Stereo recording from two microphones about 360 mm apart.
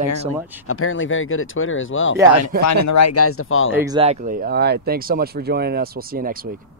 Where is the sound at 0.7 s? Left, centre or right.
Left.